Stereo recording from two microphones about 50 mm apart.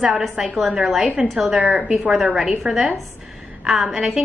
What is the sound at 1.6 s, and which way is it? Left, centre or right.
Speech, right.